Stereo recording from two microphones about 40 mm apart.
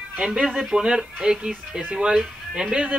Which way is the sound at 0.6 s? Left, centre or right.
Centre.